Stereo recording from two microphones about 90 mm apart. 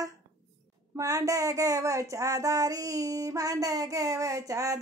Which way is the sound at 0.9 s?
35° right (ahead or behind).